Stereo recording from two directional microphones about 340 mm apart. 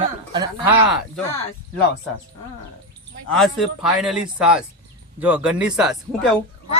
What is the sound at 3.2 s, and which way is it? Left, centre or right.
Speech, centre.